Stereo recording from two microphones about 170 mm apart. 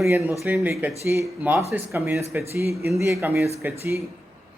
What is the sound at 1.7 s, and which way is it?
Speech, 15° right (ahead or behind).